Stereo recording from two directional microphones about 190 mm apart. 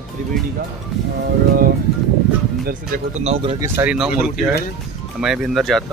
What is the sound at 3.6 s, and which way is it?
Speech, 10° right (ahead or behind).